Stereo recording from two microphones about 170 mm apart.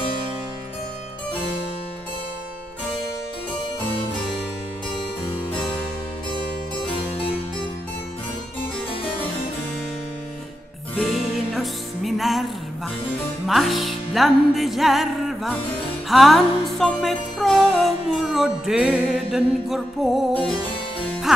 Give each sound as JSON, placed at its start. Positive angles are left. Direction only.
{"t": 6.3, "sound": "harpsichord", "side_deg": 30}
{"t": 11.0, "sound": "music", "side_deg": 0}
{"t": 13.5, "sound": "music", "side_deg": 0}